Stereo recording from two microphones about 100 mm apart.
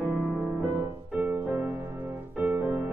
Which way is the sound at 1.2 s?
20° right (ahead or behind).